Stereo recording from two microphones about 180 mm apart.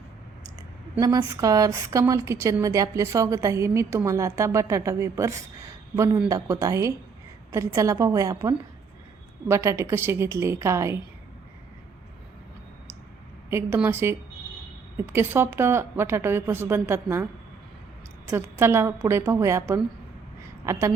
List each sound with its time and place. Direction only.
0.9 s a woman's voice: 20° right (ahead or behind)
13.5 s a woman's voice: 15° right (ahead or behind)
18.3 s a woman's voice: 15° right (ahead or behind)